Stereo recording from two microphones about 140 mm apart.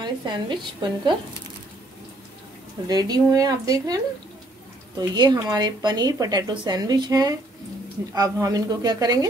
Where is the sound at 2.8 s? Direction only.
30° right (ahead or behind).